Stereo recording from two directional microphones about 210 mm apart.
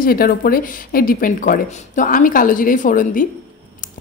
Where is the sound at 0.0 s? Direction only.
45° left (ahead or behind).